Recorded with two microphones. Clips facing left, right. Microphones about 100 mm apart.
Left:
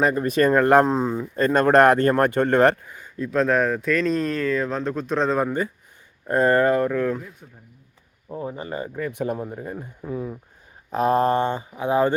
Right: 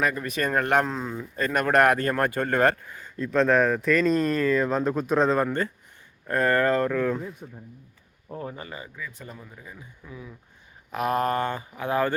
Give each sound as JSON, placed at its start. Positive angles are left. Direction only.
{"t": 0.0, "sound": "speech", "side_deg": 30}
{"t": 5.4, "sound": "speech", "side_deg": 10}
{"t": 6.2, "sound": "speech", "side_deg": 25}
{"t": 8.3, "sound": "speech", "side_deg": 15}
{"t": 8.5, "sound": "speech", "side_deg": 35}
{"t": 9.0, "sound": "speech", "side_deg": 65}
{"t": 10.9, "sound": "speech", "side_deg": 30}